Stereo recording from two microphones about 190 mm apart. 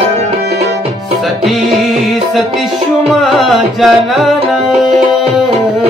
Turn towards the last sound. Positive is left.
turn(degrees=0)  # may be behind; listen again after turning